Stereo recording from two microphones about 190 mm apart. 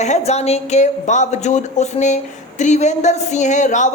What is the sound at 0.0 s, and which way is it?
Speech, 35° left (ahead or behind).